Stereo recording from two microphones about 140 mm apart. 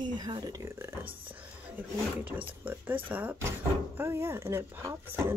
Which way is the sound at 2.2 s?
10° right (ahead or behind).